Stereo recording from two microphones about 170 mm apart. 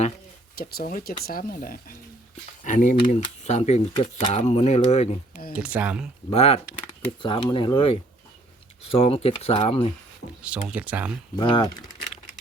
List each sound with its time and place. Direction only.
0.5 s speech: 65° left (ahead or behind); by 5.1 s 40° left (ahead or behind)
5.5 s speech: 10° right (ahead or behind)
6.3 s speech: 35° left (ahead or behind)
10.7 s speech: 10° right (ahead or behind)
11.3 s speech: 25° left (ahead or behind)